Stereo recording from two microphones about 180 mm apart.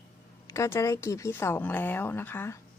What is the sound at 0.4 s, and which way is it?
Speech, 15° left (ahead or behind).